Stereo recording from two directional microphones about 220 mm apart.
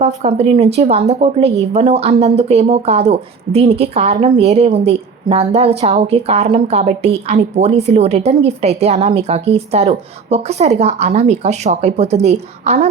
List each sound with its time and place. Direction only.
0.0 s a woman's voice: 30° right (ahead or behind)